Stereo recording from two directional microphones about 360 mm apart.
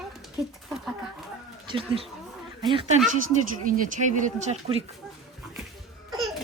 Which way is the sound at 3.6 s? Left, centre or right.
Right.